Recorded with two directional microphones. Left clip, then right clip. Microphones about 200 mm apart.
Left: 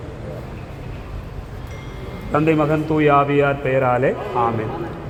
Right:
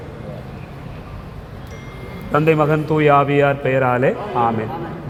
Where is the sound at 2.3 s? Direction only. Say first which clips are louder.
Right 2 dB; 45° right (ahead or behind).